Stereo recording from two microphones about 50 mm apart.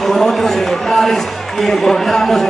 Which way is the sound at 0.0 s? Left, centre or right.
Centre.